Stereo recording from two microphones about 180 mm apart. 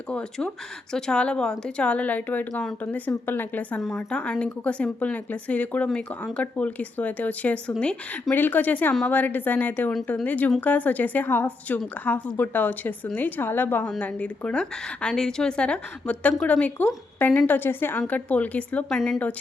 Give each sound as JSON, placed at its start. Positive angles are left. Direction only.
{"t": 0.1, "sound": "speech", "side_deg": 5}